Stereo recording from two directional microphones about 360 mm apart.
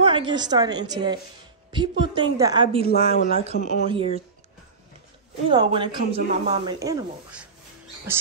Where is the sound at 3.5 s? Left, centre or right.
Left.